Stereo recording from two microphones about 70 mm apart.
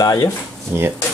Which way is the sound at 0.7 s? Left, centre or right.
Right.